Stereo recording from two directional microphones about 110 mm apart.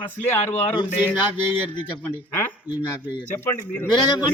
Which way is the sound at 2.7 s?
15° right (ahead or behind).